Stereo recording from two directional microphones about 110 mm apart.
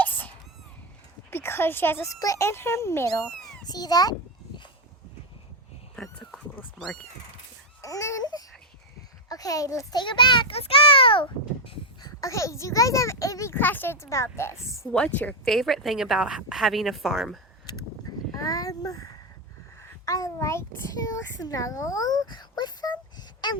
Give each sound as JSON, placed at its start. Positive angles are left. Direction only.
{"t": 0.0, "sound": "a sound", "side_deg": 15}
{"t": 1.3, "sound": "a woman's voice", "side_deg": 20}
{"t": 3.1, "sound": "speech", "side_deg": 5}
{"t": 3.7, "sound": "a child's voice", "side_deg": 35}
{"t": 6.0, "sound": "a sound", "side_deg": 5}
{"t": 6.7, "sound": "speech", "side_deg": 5}
{"t": 7.8, "sound": "a sound", "side_deg": 30}
{"t": 9.3, "sound": "a child's voice", "side_deg": 30}
{"t": 10.0, "sound": "a child's voice", "side_deg": 45}
{"t": 11.9, "sound": "a woman's voice", "side_deg": 35}
{"t": 14.9, "sound": "a woman's voice", "side_deg": 10}
{"t": 15.4, "sound": "speech", "side_deg": 0}
{"t": 18.3, "sound": "a child's voice", "side_deg": 30}